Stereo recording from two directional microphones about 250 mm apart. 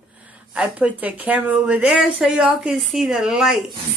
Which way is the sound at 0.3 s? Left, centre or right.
Centre.